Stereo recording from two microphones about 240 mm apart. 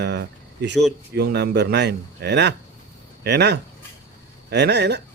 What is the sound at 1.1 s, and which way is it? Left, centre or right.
A man's voice, right.